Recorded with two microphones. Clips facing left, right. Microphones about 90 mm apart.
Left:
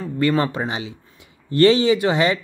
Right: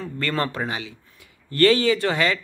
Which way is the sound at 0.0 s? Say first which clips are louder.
Left 6 dB; 15° left (ahead or behind).